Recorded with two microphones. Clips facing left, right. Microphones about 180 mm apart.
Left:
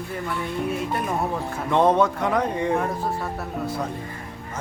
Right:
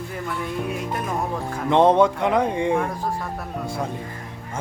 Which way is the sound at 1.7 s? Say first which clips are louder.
Right 3 dB; 20° right (ahead or behind).